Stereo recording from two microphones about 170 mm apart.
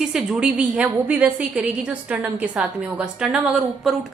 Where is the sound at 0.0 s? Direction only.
5° right (ahead or behind).